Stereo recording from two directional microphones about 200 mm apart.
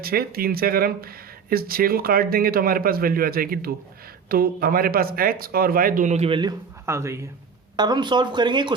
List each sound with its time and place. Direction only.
0.0 s speech: 50° right (ahead or behind); by 6.5 s 25° right (ahead or behind)
6.8 s speech: 15° right (ahead or behind)